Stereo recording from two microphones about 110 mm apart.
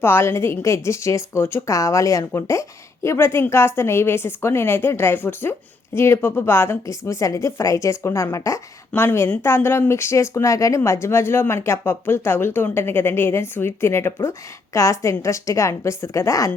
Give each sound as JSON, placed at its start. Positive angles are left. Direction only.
{"t": 0.0, "sound": "a woman's voice", "side_deg": 20}